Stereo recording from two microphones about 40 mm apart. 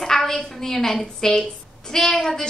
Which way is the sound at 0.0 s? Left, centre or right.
Centre.